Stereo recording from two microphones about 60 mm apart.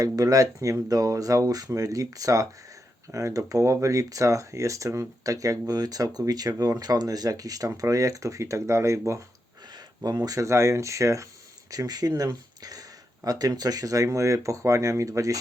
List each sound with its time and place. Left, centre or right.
0.0 s speech: right
7.8 s speech: right
10.0 s speech: right
11.7 s speech: right